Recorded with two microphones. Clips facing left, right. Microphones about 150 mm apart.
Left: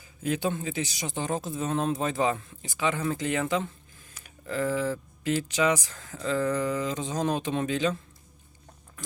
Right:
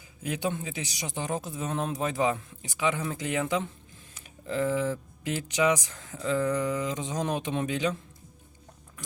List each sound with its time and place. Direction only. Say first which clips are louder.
0.2 s speech: left 3 dB; 15° right (ahead or behind)